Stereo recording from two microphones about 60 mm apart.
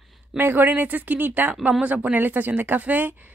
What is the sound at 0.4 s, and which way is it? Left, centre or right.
Speech, right.